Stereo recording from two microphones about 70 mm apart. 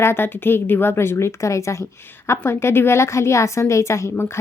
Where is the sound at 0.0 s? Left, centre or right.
Left.